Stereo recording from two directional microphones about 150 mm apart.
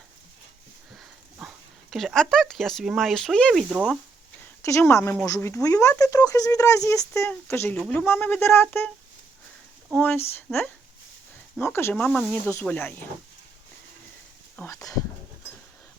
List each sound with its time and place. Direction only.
0.9 s speech: centre (ahead or behind)
4.6 s speech: 20° left (ahead or behind)
10.0 s speech: 15° left (ahead or behind)
14.5 s speech: 10° left (ahead or behind)